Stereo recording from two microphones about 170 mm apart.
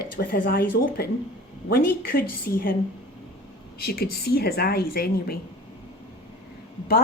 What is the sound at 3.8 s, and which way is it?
Speech, 65° left (ahead or behind).